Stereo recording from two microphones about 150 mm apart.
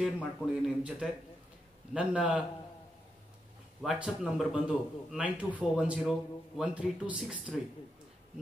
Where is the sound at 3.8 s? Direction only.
5° right (ahead or behind).